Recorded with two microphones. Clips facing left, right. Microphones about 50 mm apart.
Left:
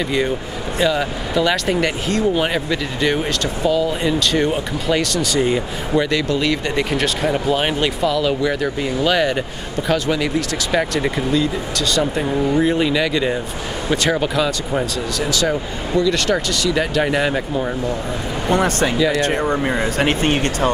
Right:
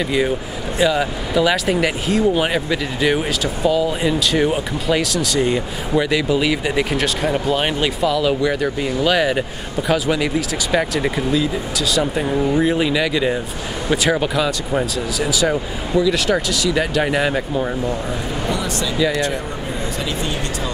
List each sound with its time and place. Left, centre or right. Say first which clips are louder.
0.7 s speech: right 1 dB; centre
18.5 s speech: left 8 dB; left
20.0 s speech: left 8 dB; left